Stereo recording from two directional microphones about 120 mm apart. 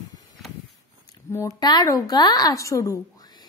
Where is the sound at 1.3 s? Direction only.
30° left (ahead or behind).